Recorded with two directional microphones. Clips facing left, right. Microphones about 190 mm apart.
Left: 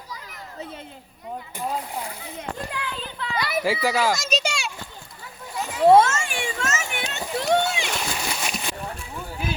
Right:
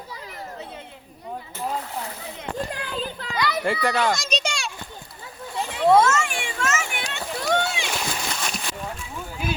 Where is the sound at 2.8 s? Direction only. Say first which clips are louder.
Right 2 dB; 40° right (ahead or behind).